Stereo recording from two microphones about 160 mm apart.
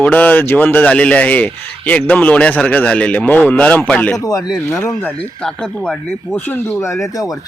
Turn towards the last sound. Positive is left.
turn(degrees=15)  # may be behind; listen again after turning